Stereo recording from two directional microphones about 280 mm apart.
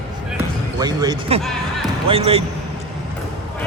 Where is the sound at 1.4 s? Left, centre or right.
Centre.